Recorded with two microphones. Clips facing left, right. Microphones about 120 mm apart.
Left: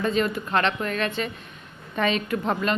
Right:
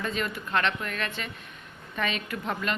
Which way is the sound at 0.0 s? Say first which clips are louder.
Left 7 dB; 30° left (ahead or behind).